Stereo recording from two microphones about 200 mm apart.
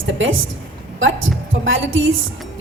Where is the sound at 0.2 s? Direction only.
80° right.